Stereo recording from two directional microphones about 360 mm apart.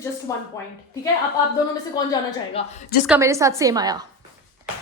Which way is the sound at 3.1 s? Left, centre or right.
Centre.